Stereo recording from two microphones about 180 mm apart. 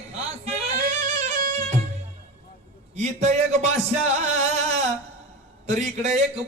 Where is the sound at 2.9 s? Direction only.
40° right (ahead or behind).